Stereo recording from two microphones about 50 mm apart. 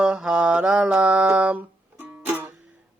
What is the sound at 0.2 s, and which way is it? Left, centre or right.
Mantra, centre.